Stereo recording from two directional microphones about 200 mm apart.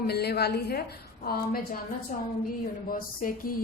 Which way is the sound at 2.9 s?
45° left (ahead or behind).